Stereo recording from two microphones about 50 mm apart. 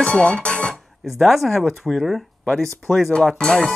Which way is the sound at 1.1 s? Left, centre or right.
Centre.